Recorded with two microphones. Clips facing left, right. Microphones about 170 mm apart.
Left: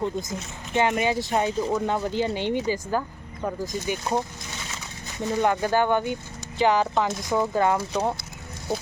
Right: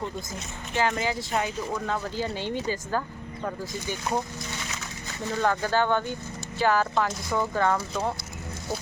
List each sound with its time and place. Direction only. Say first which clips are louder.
0.8 s speech: left 4 dB; 20° left (ahead or behind)
5.3 s speech: left 3 dB; 15° left (ahead or behind)